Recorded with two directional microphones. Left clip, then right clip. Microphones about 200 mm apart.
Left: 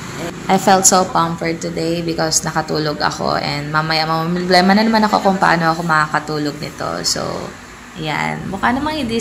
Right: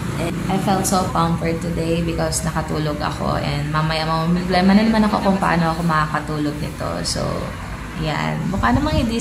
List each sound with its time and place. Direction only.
0.5 s a woman's voice: 35° left (ahead or behind)
8.1 s a woman's voice: 15° left (ahead or behind)